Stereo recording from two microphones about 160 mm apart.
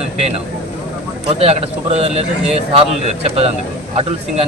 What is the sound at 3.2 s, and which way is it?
Speech, 40° right (ahead or behind).